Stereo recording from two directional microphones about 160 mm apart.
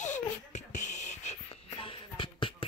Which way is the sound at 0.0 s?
50° left (ahead or behind).